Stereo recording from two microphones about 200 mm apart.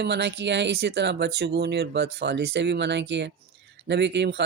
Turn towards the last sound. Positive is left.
turn(degrees=-60)  # may be behind; listen again after turning